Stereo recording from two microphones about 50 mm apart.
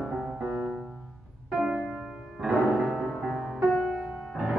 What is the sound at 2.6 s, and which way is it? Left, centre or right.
Music, centre.